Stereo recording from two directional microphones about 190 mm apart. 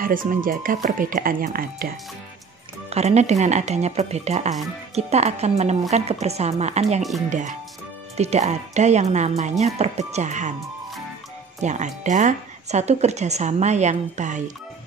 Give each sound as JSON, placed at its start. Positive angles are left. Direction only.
{"t": 0.0, "sound": "speech", "side_deg": -45}
{"t": 2.9, "sound": "speech", "side_deg": -35}
{"t": 11.6, "sound": "speech", "side_deg": -40}